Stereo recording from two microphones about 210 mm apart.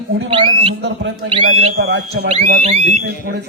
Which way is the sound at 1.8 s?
50° right (ahead or behind).